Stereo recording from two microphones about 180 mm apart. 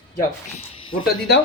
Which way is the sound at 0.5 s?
30° left (ahead or behind).